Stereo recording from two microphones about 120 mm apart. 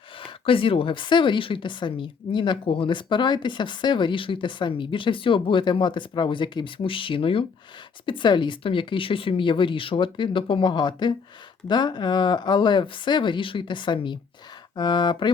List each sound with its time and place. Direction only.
0.2 s speech: 50° left (ahead or behind)